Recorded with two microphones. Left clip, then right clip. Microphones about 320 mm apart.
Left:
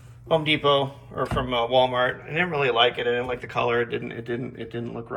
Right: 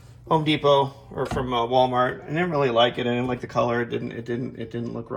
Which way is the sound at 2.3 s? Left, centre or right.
Centre.